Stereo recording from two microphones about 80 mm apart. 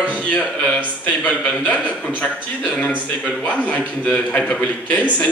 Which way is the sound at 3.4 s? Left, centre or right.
Centre.